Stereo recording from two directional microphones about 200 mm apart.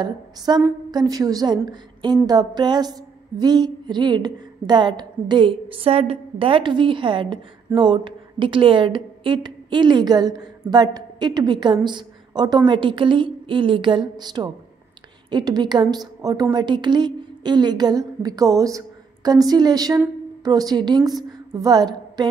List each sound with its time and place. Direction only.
0.0 s a woman's voice: 15° right (ahead or behind)